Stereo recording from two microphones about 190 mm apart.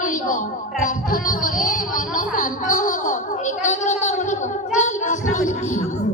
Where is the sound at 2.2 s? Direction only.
45° left (ahead or behind).